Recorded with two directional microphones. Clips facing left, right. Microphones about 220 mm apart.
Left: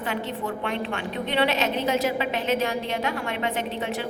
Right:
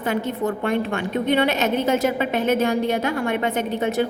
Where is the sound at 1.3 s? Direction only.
45° right (ahead or behind).